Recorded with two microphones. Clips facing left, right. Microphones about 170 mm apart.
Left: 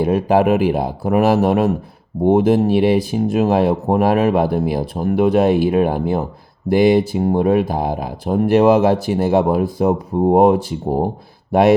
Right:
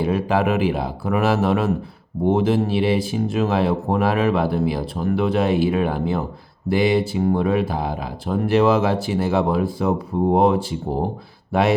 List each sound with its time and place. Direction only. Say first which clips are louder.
0.0 s speech: left 5 dB; 45° left (ahead or behind)